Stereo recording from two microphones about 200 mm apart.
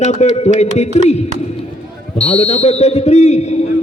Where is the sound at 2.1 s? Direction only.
30° left (ahead or behind).